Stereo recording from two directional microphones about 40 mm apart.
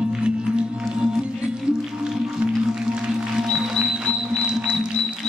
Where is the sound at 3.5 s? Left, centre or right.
Centre.